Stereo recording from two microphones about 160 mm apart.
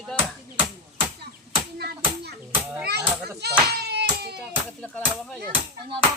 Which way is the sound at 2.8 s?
90° right.